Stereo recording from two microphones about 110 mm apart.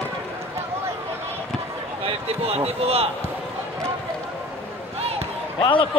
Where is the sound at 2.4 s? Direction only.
70° right (ahead or behind).